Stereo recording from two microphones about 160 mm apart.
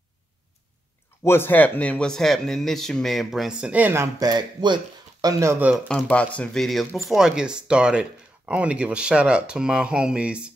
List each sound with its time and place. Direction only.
1.2 s speech: 15° left (ahead or behind); by 5.8 s 15° right (ahead or behind)
5.9 s speech: 5° left (ahead or behind)